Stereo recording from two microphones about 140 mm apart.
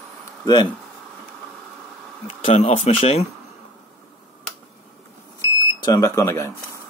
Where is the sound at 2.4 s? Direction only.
50° left (ahead or behind).